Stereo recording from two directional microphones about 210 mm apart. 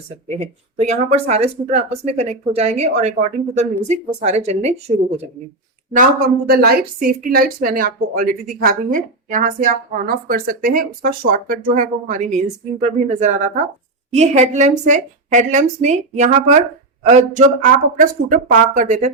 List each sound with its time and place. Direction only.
0.3 s a woman's voice: 30° right (ahead or behind)
5.9 s a woman's voice: 40° right (ahead or behind)